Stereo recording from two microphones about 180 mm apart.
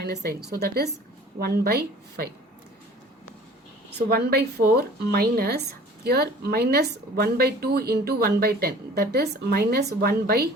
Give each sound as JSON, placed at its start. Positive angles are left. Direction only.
{"t": 0.0, "sound": "speech", "side_deg": -65}
{"t": 3.9, "sound": "speech", "side_deg": -65}